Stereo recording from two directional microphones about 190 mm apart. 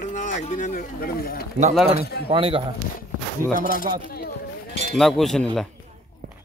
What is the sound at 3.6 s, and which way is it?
Speech, 45° left (ahead or behind).